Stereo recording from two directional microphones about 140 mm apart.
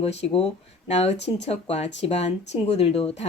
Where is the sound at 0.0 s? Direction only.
50° left (ahead or behind).